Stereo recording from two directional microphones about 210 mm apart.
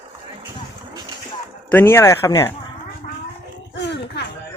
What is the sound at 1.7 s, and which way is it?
Speech, 10° left (ahead or behind).